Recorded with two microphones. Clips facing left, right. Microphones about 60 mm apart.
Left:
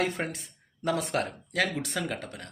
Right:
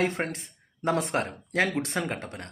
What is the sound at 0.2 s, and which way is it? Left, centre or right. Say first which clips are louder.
Speech: right 2 dB; right.